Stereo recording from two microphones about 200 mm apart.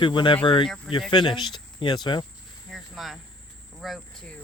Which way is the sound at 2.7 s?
Centre (ahead or behind).